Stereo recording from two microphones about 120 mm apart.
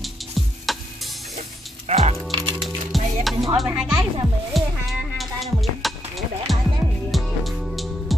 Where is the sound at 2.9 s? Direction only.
Centre (ahead or behind).